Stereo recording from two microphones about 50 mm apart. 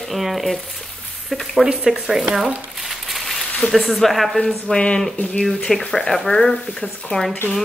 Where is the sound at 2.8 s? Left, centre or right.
Centre.